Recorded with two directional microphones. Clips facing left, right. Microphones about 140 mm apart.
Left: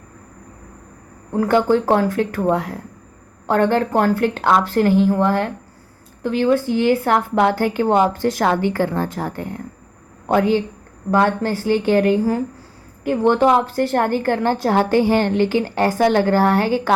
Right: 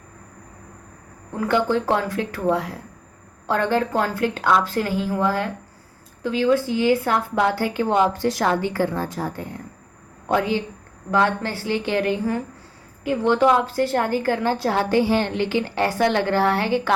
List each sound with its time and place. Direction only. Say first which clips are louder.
1.4 s a woman's voice: left 5 dB; 45° left (ahead or behind)